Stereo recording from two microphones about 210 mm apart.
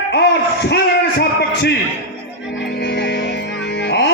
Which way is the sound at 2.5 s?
55° left (ahead or behind).